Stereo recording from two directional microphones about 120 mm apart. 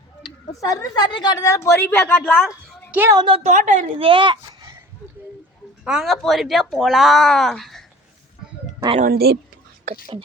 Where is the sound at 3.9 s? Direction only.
45° right (ahead or behind).